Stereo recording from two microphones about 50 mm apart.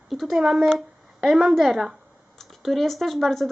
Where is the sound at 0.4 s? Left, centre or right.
Centre.